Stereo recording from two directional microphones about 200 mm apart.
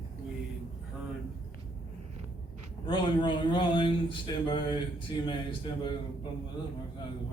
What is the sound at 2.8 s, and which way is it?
Speech, 25° left (ahead or behind).